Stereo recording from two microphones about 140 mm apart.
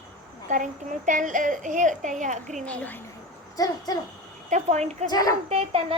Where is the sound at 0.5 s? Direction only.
65° right (ahead or behind).